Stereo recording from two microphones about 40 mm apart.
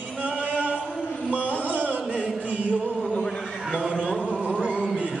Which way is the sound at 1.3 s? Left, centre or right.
Right.